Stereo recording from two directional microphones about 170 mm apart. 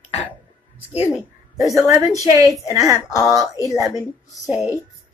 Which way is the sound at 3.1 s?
20° left (ahead or behind).